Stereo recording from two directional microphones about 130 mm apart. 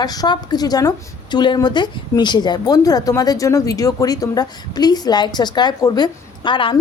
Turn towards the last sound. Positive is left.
turn(degrees=40)  # may be behind; listen again after turning